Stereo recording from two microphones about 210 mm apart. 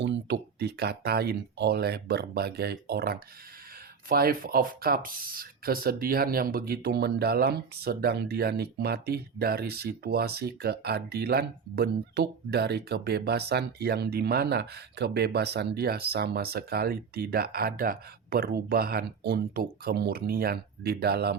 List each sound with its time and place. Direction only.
0.0 s speech: 55° right (ahead or behind)